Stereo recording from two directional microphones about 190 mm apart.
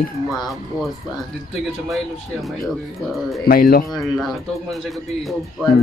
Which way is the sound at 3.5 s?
50° left (ahead or behind).